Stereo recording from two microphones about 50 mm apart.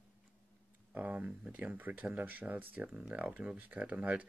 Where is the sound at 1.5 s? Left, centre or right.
Right.